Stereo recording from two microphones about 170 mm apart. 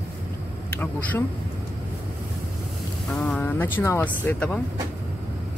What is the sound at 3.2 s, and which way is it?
Speech, 10° left (ahead or behind).